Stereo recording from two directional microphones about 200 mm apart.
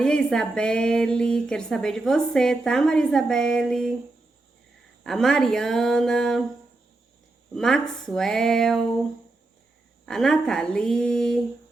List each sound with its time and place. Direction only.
0.0 s speech: 5° left (ahead or behind)
5.0 s speech: centre (ahead or behind)
7.5 s speech: centre (ahead or behind)
10.1 s speech: centre (ahead or behind)